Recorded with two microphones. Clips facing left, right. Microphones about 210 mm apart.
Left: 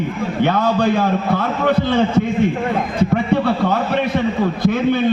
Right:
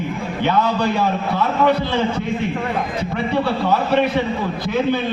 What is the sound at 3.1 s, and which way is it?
Speech, 55° left (ahead or behind).